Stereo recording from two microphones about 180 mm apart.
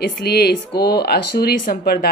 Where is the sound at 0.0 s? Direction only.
60° left (ahead or behind).